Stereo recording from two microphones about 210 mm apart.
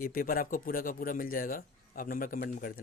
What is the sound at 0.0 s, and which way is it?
Speech, 45° left (ahead or behind).